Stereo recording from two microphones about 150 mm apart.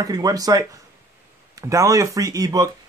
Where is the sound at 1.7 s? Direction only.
20° right (ahead or behind).